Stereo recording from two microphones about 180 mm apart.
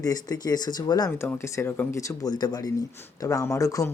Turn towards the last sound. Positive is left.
turn(degrees=15)  # may be behind; listen again after turning